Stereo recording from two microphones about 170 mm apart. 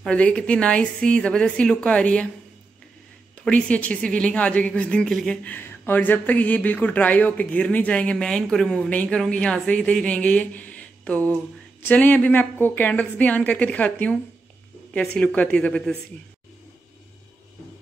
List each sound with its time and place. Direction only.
0.0 s a woman's voice: 5° left (ahead or behind)
3.3 s a woman's voice: 5° left (ahead or behind)